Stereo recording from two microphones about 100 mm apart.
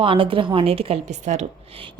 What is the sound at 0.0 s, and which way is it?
Speech, 60° right (ahead or behind).